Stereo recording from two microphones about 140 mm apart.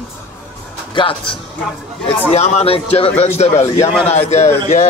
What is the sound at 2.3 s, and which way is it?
Speech, 50° left (ahead or behind).